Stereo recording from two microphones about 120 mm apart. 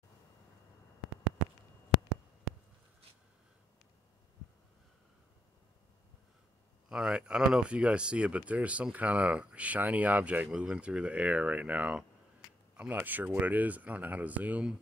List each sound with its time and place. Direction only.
6.9 s speech: 5° right (ahead or behind)